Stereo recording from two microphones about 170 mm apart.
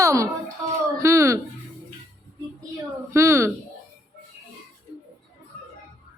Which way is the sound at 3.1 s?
15° right (ahead or behind).